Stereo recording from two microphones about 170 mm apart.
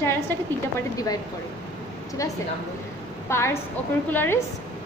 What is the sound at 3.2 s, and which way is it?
A woman's voice, 15° left (ahead or behind).